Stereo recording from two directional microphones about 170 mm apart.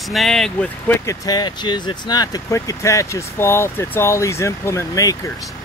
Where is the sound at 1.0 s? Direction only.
20° left (ahead or behind).